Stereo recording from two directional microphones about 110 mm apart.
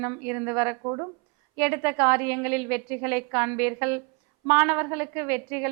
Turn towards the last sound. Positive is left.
turn(degrees=-15)  # may be behind; listen again after turning